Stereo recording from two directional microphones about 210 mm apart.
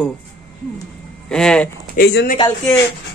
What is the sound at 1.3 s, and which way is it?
Speech, 5° left (ahead or behind).